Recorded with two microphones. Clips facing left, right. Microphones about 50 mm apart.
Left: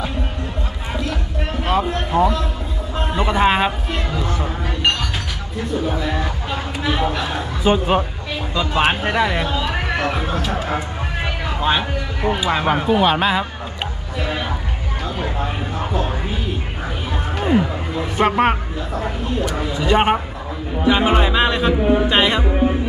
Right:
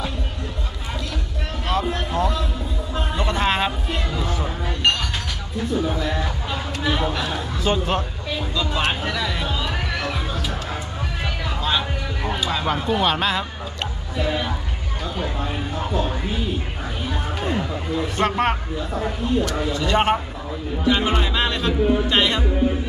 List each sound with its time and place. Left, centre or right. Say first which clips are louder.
1.8 s speech: left 5 dB; centre
7.6 s speech: left 6 dB; centre
8.5 s speech: left 6 dB; left
9.5 s speech: left 4 dB; centre
9.8 s speech: left 5 dB; left
11.2 s a sound: left 5 dB; left
12.6 s speech: left 4 dB; centre
17.4 s music: left 8 dB; centre
18.1 s speech: left 6 dB; centre
22.5 s music: left 3 dB; left